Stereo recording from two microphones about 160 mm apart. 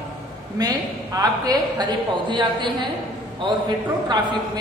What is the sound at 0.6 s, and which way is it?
A woman's voice, 25° right (ahead or behind).